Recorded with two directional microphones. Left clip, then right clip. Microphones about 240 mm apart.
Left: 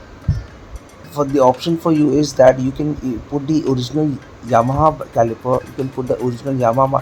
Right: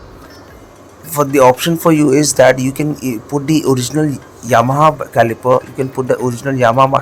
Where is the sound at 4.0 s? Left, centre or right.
Centre.